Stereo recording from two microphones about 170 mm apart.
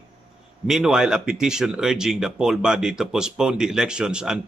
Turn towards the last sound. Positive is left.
turn(degrees=-5)  # may be behind; listen again after turning